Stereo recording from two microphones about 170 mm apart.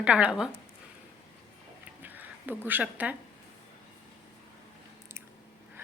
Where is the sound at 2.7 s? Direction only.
10° right (ahead or behind).